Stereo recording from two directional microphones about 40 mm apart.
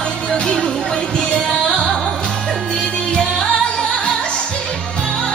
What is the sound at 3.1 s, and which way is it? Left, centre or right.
Music, centre.